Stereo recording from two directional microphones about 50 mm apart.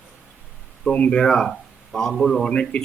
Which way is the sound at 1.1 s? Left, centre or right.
Centre.